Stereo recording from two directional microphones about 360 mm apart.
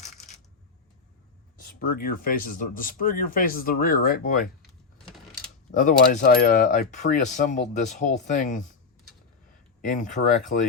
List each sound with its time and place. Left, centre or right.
0.0 s coin: centre
1.6 s speech: left
5.7 s speech: left
9.8 s speech: left